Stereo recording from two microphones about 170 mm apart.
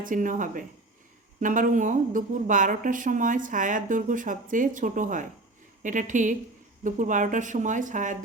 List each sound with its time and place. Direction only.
0.0 s speech: 50° right (ahead or behind)